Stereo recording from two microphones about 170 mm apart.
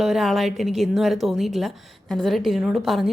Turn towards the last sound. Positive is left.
turn(degrees=0)  # may be behind; listen again after turning